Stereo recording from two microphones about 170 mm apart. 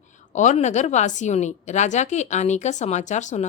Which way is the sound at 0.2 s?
45° left (ahead or behind).